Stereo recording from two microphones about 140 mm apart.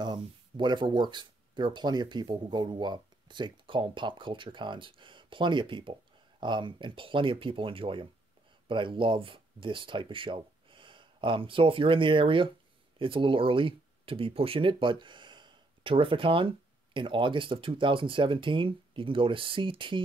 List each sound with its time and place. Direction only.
0.0 s speech: 30° right (ahead or behind)